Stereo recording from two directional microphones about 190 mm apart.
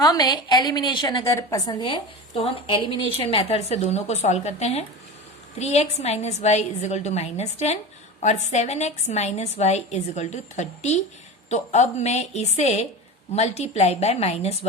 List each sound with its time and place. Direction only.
0.0 s a woman's voice: 20° left (ahead or behind)